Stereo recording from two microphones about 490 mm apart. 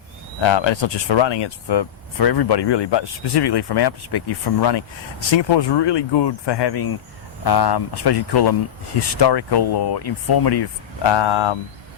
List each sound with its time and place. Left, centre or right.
0.4 s speech: left
5.3 s speech: left